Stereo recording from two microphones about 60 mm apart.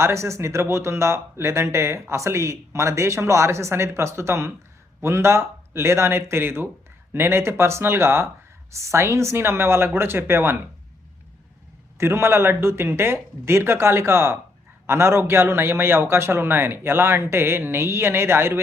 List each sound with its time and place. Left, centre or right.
0.0 s speech: right
11.9 s speech: right